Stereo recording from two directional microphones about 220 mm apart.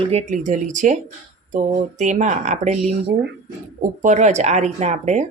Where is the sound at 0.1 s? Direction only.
30° right (ahead or behind).